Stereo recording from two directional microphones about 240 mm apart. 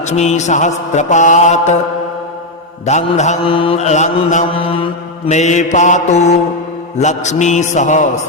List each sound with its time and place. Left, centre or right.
0.0 s mantra: left
2.8 s mantra: left